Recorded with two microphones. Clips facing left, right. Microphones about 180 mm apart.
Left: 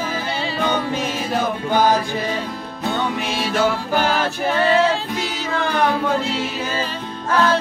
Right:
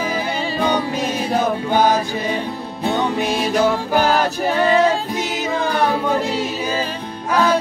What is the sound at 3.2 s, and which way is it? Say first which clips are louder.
Music: right 3 dB; 40° right (ahead or behind).